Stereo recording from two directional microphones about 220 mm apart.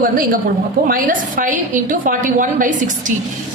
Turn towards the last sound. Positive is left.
turn(degrees=-35)  # may be behind; listen again after turning